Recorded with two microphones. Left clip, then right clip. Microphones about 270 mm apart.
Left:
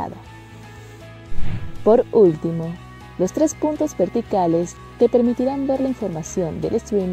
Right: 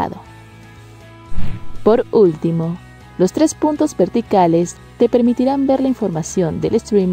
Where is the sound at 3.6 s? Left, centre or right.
Centre.